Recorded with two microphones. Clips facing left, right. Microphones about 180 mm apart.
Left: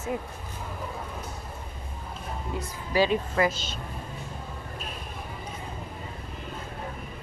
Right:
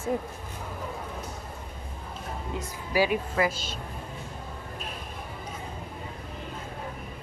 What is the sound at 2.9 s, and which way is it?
Speech, 10° right (ahead or behind).